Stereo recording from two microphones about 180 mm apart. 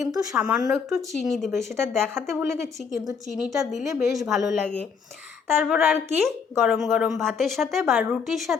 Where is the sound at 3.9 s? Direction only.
20° right (ahead or behind).